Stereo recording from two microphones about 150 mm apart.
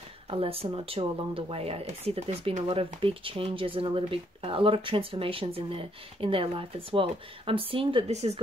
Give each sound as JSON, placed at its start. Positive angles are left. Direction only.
{"t": 0.3, "sound": "speech", "side_deg": -40}